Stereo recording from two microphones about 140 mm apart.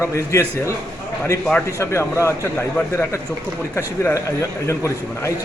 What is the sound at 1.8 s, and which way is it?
A man's voice, 20° left (ahead or behind).